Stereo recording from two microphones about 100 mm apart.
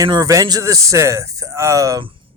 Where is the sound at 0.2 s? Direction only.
35° right (ahead or behind).